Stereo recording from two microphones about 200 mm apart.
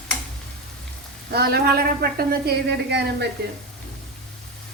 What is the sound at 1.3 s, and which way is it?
A woman's voice, 55° right (ahead or behind).